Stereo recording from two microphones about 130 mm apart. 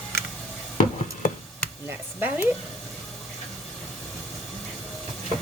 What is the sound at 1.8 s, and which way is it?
Speech, 15° right (ahead or behind).